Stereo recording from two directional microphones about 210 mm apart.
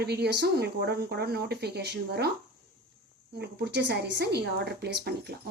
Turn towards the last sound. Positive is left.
turn(degrees=-50)  # may be behind; listen again after turning